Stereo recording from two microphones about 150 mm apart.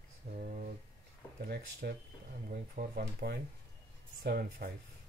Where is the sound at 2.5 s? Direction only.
80° right.